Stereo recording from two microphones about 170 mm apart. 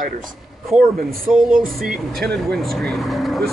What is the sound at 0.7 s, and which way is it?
Speech, 5° right (ahead or behind).